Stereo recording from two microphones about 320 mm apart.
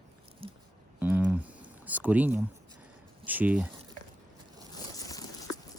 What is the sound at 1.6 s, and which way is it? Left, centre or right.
Speech, centre.